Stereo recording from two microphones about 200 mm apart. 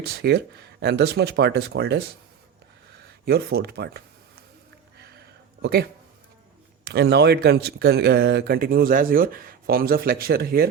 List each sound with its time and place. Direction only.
0.2 s speech: 55° right (ahead or behind)
3.2 s a man's voice: 50° right (ahead or behind)
4.9 s a sound: 55° right (ahead or behind)
5.6 s a man's voice: 55° right (ahead or behind)